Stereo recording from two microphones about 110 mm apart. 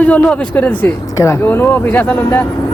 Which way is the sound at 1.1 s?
30° left (ahead or behind).